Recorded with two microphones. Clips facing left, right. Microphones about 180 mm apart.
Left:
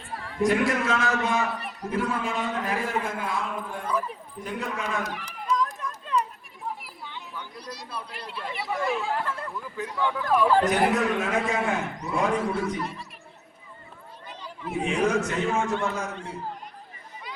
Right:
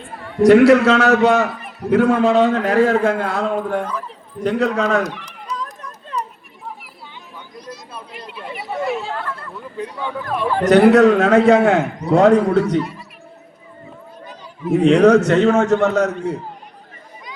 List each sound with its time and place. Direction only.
0.4 s a man's voice: 75° right (ahead or behind)
8.4 s a sound: 30° right (ahead or behind)
9.1 s chatter: 15° left (ahead or behind)
9.9 s speech: 20° right (ahead or behind)
10.6 s a man's voice: 75° right (ahead or behind)
14.8 s a man's voice: 75° right (ahead or behind)